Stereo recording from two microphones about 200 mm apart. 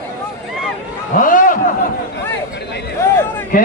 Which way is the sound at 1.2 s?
40° left (ahead or behind).